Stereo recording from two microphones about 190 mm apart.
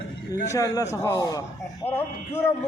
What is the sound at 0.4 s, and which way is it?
A man's voice, 15° left (ahead or behind).